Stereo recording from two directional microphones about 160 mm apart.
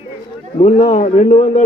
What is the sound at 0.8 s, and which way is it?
Speech, 50° left (ahead or behind).